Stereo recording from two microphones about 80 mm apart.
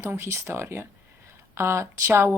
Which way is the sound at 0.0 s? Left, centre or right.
Right.